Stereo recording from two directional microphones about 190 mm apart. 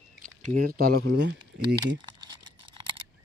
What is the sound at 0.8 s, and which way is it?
Speech, 55° right (ahead or behind).